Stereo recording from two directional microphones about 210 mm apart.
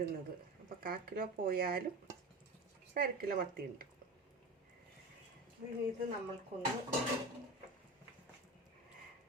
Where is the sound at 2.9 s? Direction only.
45° right (ahead or behind).